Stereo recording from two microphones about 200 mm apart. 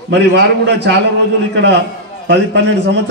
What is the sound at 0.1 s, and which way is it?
A man's voice, 55° right (ahead or behind).